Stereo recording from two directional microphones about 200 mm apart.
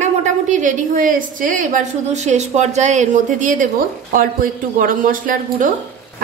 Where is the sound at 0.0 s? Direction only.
35° right (ahead or behind).